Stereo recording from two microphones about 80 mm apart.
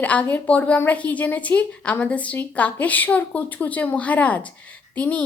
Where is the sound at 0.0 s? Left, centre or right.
Centre.